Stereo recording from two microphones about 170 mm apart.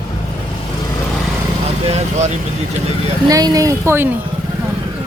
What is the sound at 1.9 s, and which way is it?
Speech, 40° right (ahead or behind).